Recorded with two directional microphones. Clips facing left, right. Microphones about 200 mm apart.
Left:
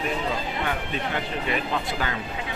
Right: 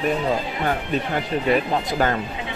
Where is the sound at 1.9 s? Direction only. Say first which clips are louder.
Right 8 dB; 45° right (ahead or behind).